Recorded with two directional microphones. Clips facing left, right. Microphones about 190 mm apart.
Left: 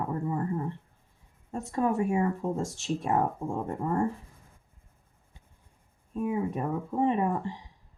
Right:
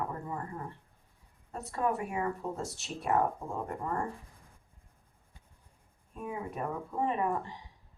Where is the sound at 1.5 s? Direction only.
25° left (ahead or behind).